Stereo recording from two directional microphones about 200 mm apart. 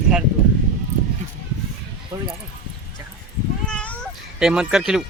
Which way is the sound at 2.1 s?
20° right (ahead or behind).